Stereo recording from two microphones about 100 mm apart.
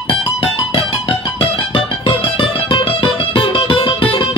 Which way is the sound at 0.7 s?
80° left.